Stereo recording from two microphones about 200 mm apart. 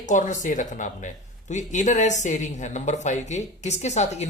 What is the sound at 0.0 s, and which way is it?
Speech, 40° left (ahead or behind).